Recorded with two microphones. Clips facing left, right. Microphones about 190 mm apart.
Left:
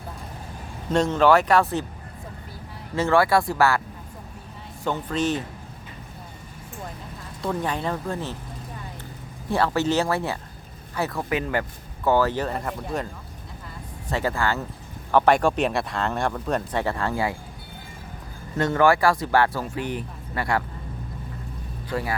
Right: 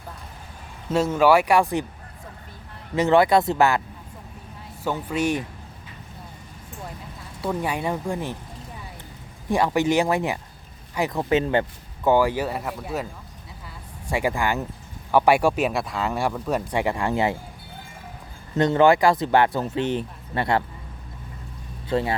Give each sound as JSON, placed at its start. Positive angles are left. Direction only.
{"t": 0.9, "sound": "speech", "side_deg": -5}
{"t": 2.9, "sound": "speech", "side_deg": -20}
{"t": 4.8, "sound": "speech", "side_deg": -10}
{"t": 7.4, "sound": "speech", "side_deg": -10}
{"t": 9.5, "sound": "speech", "side_deg": -15}
{"t": 12.0, "sound": "speech", "side_deg": -15}
{"t": 14.1, "sound": "speech", "side_deg": -15}
{"t": 18.5, "sound": "speech", "side_deg": -20}
{"t": 21.8, "sound": "speech", "side_deg": -25}